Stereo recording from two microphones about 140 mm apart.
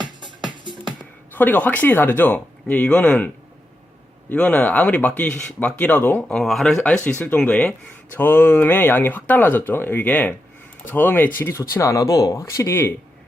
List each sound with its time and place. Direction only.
0.0 s music: 35° right (ahead or behind)
1.3 s speech: 15° left (ahead or behind)
6.3 s speech: centre (ahead or behind); by 12.9 s 20° left (ahead or behind)